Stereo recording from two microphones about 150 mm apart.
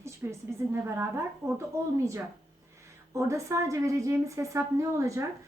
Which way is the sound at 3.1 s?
20° right (ahead or behind).